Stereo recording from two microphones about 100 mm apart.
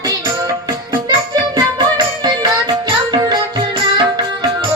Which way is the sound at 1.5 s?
45° right (ahead or behind).